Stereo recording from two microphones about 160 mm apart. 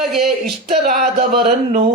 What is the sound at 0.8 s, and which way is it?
Music, 50° right (ahead or behind).